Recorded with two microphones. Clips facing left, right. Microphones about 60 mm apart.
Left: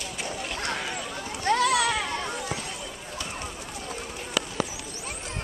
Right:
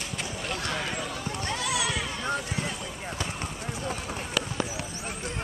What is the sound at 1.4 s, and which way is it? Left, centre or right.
Run, left.